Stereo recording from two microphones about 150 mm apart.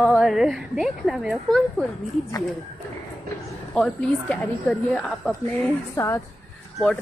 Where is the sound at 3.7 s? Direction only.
5° left (ahead or behind).